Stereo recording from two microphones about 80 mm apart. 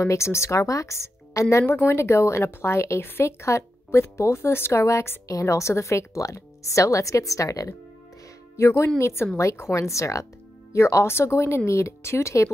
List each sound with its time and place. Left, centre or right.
0.0 s speech: left